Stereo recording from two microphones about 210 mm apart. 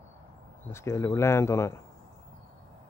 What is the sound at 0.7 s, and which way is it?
Speech, 15° left (ahead or behind).